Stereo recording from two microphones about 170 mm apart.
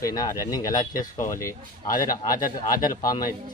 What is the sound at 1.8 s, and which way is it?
Speech, 55° left (ahead or behind).